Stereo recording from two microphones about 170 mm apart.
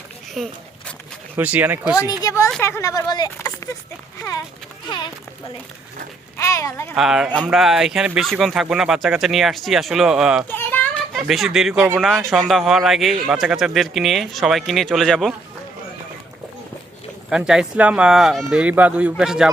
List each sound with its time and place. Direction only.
0.3 s a sound: centre (ahead or behind)
1.4 s speech: 10° right (ahead or behind)
2.2 s a woman's voice: 20° left (ahead or behind)
6.3 s speech: 15° left (ahead or behind)
6.9 s speech: 5° right (ahead or behind)
10.5 s children playing: 10° left (ahead or behind)
11.7 s speech: 15° right (ahead or behind)
11.9 s speech: centre (ahead or behind)
17.2 s speech: 5° right (ahead or behind)